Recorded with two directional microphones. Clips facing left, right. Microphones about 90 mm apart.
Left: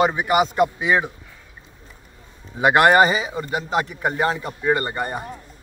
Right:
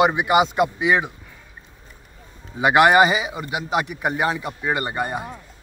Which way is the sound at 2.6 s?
10° right (ahead or behind).